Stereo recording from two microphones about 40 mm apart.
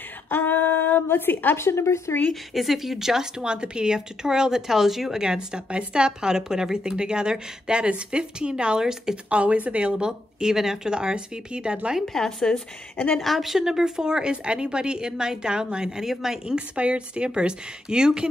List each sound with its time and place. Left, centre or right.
0.3 s a sound: left
1.0 s a woman's voice: left
2.5 s a woman's voice: centre
9.3 s a woman's voice: right; by 10.9 s centre
10.9 s a woman's voice: right
12.1 s speech: centre
12.9 s speech: left
13.2 s speech: centre
13.7 s a woman's voice: centre
16.5 s a woman's voice: right